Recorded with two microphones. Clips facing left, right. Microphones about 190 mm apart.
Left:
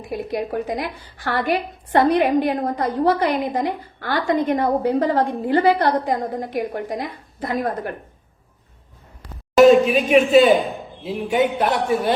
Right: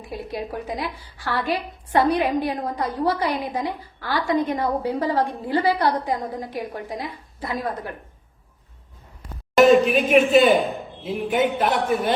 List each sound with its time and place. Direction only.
0.3 s a woman's voice: 55° left (ahead or behind)
9.6 s a man's voice: centre (ahead or behind)